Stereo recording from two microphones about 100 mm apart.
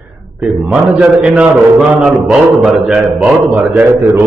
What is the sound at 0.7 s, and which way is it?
A man's voice, 15° right (ahead or behind).